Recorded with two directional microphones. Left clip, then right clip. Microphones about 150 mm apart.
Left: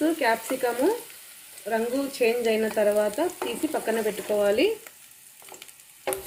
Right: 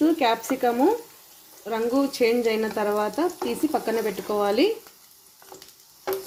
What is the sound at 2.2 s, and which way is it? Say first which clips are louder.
Speech: even; 75° right (ahead or behind).